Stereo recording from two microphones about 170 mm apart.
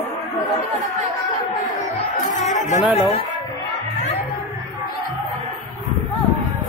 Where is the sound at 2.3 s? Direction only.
45° left (ahead or behind).